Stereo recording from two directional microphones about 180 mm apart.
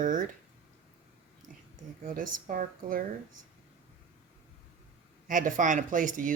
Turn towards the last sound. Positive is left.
turn(degrees=-45)  # may be behind; listen again after turning